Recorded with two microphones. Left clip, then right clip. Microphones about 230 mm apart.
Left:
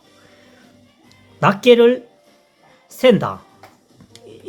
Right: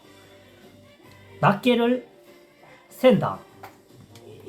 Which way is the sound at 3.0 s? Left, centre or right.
Left.